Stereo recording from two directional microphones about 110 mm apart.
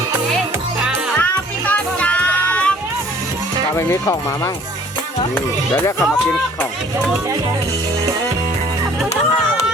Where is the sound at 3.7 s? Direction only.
25° left (ahead or behind).